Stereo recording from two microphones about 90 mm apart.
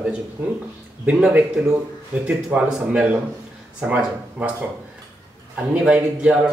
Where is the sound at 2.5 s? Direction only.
20° right (ahead or behind).